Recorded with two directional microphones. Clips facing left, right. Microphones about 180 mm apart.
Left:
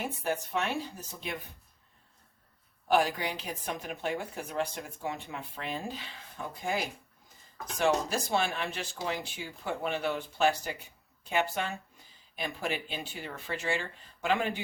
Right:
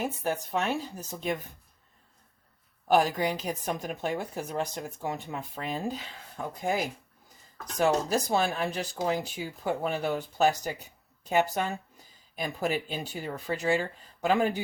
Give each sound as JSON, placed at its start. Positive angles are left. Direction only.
{"t": 0.0, "sound": "speech", "side_deg": -40}
{"t": 2.8, "sound": "speech", "side_deg": -40}
{"t": 7.8, "sound": "speech", "side_deg": -40}